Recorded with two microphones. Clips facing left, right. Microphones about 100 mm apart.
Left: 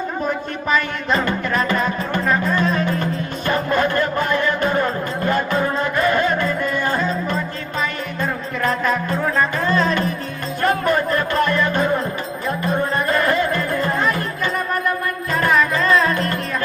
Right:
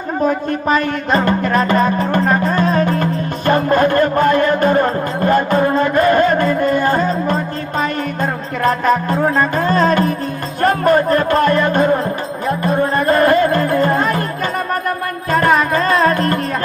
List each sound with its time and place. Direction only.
0.3 s music: 45° right (ahead or behind)